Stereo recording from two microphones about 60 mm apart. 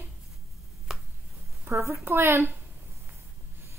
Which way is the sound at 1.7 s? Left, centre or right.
Right.